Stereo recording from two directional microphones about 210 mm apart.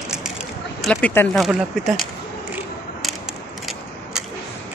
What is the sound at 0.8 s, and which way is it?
Speech, 10° left (ahead or behind).